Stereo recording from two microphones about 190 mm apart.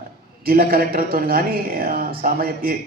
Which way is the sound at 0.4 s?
50° right (ahead or behind).